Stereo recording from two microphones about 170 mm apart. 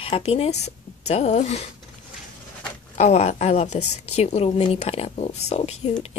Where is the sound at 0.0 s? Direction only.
35° left (ahead or behind).